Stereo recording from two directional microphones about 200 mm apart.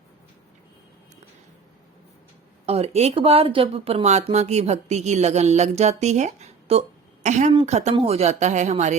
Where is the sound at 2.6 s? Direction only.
30° right (ahead or behind).